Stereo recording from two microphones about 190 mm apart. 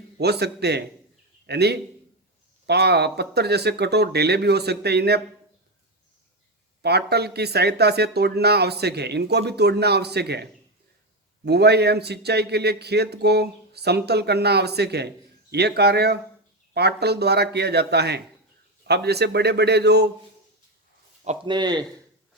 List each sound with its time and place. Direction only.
0.2 s speech: 60° right (ahead or behind)
6.8 s speech: 60° right (ahead or behind)
21.4 s speech: 25° right (ahead or behind)